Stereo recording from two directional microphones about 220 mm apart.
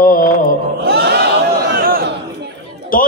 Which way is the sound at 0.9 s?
45° right (ahead or behind).